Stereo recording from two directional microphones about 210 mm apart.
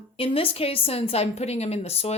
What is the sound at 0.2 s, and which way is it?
A woman's voice, 25° left (ahead or behind).